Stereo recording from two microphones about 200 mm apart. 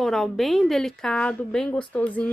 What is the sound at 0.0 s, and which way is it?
Speech, centre (ahead or behind).